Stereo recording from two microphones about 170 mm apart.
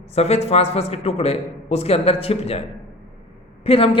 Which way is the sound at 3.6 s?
35° left (ahead or behind).